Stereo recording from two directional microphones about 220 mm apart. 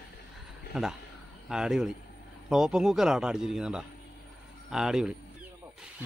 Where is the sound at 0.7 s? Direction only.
5° right (ahead or behind).